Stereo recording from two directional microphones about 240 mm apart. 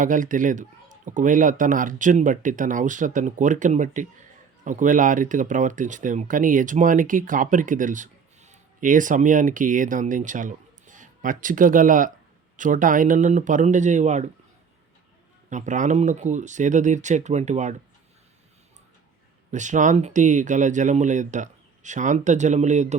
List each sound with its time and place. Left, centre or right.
0.0 s speech: right
15.4 s speech: right
19.5 s speech: right